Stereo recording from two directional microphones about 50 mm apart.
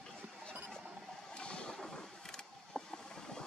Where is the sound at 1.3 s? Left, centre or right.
Centre.